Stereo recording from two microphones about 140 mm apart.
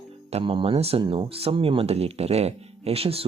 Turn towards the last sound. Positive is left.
turn(degrees=-45)  # may be behind; listen again after turning